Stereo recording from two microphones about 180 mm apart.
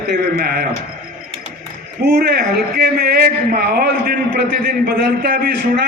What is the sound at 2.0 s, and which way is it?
Speech, 55° right (ahead or behind).